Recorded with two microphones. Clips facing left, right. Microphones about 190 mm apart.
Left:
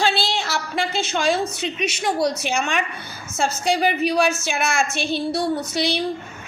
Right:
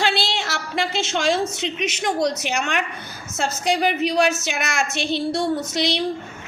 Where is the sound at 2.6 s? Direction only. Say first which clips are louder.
Left 1 dB; 65° right (ahead or behind).